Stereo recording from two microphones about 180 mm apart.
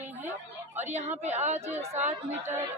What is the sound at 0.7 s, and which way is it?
A woman's voice, 40° right (ahead or behind).